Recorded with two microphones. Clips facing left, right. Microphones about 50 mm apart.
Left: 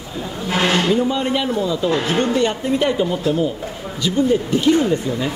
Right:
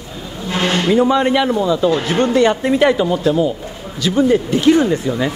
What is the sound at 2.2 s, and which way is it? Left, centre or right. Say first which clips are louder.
A man's voice: right 5 dB; right.